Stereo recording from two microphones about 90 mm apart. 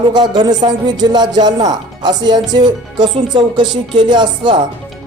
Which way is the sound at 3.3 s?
60° right (ahead or behind).